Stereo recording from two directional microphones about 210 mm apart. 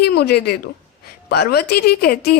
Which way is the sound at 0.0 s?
50° left (ahead or behind).